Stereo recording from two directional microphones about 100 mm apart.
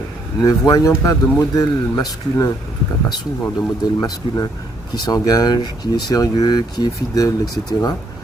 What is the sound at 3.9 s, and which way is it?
Speech, 40° left (ahead or behind).